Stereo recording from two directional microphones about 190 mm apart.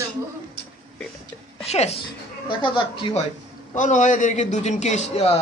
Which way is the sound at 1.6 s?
35° left (ahead or behind).